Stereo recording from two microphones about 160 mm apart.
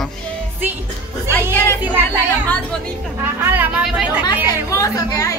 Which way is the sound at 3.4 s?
10° right (ahead or behind).